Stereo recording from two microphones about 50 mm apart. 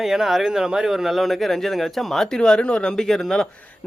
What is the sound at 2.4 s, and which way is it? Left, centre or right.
Speech, centre.